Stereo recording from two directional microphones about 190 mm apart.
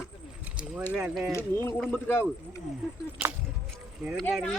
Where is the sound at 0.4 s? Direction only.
5° right (ahead or behind).